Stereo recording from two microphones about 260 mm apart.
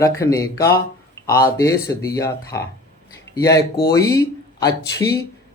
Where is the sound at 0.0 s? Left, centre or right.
Centre.